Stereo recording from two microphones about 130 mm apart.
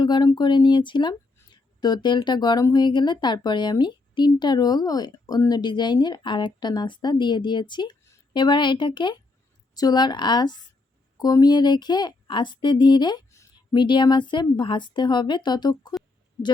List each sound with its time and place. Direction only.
0.0 s speech: 35° left (ahead or behind)